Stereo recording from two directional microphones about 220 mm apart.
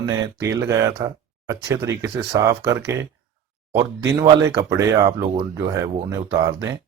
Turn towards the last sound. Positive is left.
turn(degrees=-15)  # may be behind; listen again after turning